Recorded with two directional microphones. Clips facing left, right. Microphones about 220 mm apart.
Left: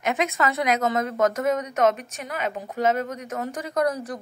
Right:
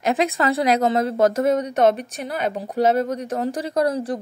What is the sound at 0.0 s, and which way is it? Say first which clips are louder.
A woman's voice: right 4 dB; 35° right (ahead or behind).